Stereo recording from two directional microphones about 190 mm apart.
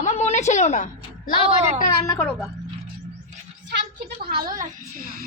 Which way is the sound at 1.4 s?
30° right (ahead or behind).